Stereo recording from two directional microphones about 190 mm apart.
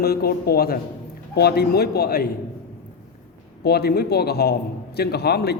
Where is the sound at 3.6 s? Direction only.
55° left (ahead or behind).